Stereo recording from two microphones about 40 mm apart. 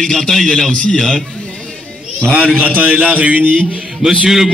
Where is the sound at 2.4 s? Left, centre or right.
Right.